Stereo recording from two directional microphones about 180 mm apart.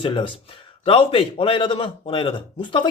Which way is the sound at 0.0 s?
25° left (ahead or behind).